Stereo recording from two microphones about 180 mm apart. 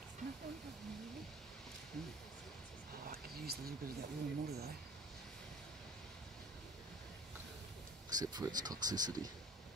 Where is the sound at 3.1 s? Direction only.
60° right (ahead or behind).